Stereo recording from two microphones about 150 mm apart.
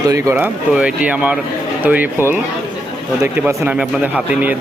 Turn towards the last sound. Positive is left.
turn(degrees=-10)  # may be behind; listen again after turning